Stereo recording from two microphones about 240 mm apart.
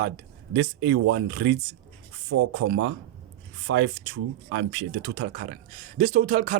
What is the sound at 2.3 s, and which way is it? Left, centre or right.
Speech, right.